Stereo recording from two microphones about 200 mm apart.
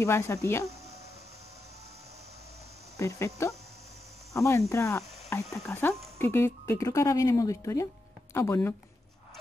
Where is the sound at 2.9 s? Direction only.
15° left (ahead or behind).